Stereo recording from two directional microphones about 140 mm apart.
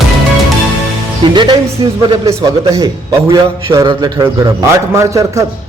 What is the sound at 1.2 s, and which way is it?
Speech, 35° right (ahead or behind).